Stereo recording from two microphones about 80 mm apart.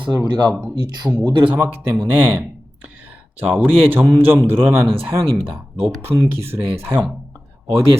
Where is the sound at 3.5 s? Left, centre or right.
Right.